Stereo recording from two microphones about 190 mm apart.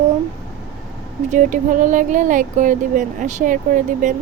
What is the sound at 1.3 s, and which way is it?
Speech, 45° right (ahead or behind).